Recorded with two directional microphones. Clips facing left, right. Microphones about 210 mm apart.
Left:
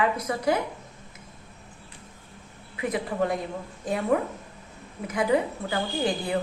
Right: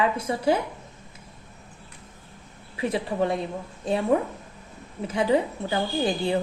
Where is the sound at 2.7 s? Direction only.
30° right (ahead or behind).